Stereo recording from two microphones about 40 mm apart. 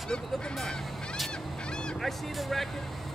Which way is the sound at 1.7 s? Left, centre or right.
Left.